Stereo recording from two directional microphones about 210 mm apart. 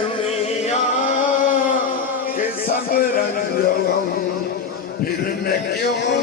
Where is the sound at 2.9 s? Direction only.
45° left (ahead or behind).